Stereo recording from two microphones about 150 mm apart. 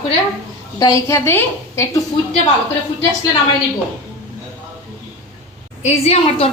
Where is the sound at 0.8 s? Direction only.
20° left (ahead or behind).